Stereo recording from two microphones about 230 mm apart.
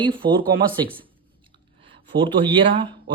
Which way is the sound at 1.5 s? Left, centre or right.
Right.